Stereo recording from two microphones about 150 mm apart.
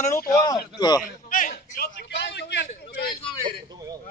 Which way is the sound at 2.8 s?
90° left.